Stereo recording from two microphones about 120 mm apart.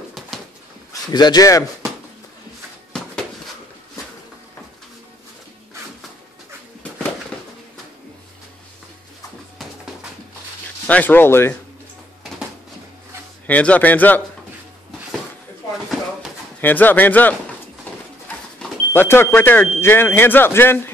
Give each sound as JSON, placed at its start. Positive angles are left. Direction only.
{"t": 1.0, "sound": "speech", "side_deg": 35}
{"t": 10.9, "sound": "speech", "side_deg": 15}
{"t": 13.5, "sound": "speech", "side_deg": 10}
{"t": 16.6, "sound": "speech", "side_deg": 15}
{"t": 17.9, "sound": "a sound", "side_deg": 15}
{"t": 18.9, "sound": "speech", "side_deg": 20}